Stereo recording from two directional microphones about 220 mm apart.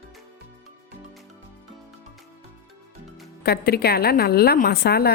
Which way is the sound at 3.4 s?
45° left (ahead or behind).